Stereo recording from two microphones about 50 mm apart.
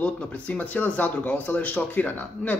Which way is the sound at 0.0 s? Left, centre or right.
Left.